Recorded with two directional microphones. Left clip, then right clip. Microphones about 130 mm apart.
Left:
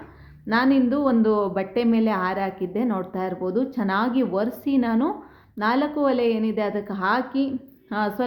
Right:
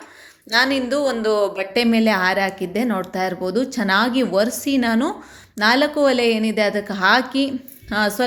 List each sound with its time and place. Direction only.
0.5 s speech: 20° right (ahead or behind)